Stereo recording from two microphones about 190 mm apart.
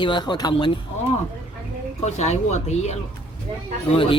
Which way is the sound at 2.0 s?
35° left (ahead or behind).